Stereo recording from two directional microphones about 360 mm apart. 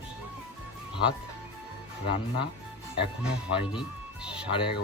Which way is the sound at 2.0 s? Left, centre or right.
Centre.